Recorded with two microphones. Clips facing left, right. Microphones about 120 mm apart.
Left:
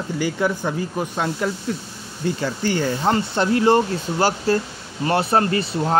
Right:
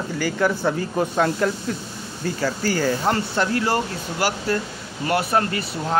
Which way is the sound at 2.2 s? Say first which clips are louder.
Left 1 dB; 25° left (ahead or behind).